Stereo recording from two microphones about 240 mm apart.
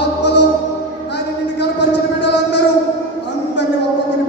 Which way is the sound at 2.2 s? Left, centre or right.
Left.